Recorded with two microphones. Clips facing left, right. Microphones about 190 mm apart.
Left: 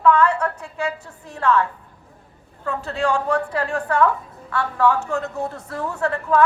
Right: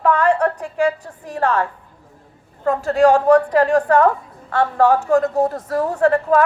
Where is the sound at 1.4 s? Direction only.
45° right (ahead or behind).